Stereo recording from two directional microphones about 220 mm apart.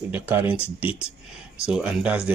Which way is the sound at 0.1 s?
10° right (ahead or behind).